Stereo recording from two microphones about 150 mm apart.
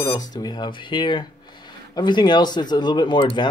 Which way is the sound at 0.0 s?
25° left (ahead or behind).